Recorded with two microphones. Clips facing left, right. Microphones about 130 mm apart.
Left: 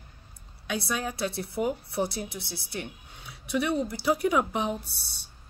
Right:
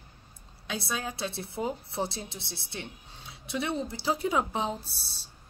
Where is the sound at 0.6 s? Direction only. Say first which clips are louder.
Left 3 dB; 25° right (ahead or behind).